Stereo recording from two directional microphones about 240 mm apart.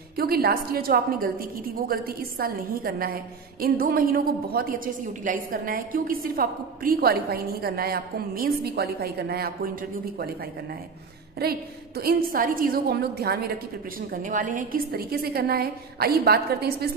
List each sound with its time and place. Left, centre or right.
0.1 s a woman's voice: right
11.4 s a woman's voice: right